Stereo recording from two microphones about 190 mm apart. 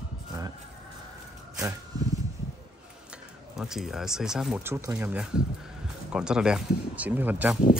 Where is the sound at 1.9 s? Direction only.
20° right (ahead or behind).